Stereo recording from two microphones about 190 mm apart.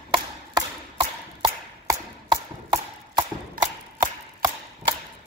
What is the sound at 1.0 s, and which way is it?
Chopping, 25° right (ahead or behind).